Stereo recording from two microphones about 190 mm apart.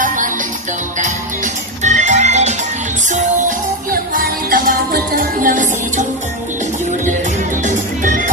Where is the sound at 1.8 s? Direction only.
40° right (ahead or behind).